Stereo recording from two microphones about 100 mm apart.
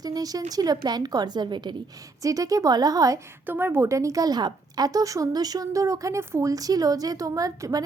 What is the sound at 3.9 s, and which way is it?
Speech, 35° right (ahead or behind).